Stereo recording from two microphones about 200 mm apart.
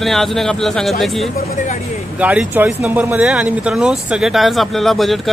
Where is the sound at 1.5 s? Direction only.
40° left (ahead or behind).